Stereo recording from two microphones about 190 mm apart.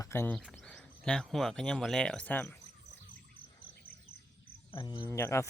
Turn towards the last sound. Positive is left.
turn(degrees=15)  # may be behind; listen again after turning